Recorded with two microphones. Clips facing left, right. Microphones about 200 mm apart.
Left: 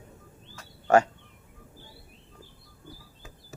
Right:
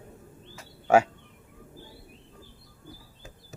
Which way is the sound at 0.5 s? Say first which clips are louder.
Even; 10° right (ahead or behind).